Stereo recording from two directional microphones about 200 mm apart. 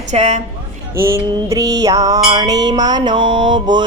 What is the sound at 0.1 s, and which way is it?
Speech, 35° right (ahead or behind).